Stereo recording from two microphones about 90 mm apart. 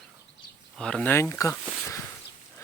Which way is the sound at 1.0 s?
30° left (ahead or behind).